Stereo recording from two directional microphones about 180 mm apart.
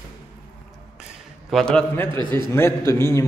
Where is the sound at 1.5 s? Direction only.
5° left (ahead or behind).